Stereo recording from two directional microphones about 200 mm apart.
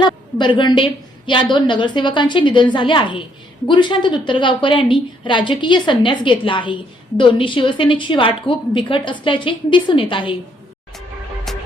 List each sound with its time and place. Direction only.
0.0 s a woman's voice: 25° left (ahead or behind)
11.5 s music: centre (ahead or behind)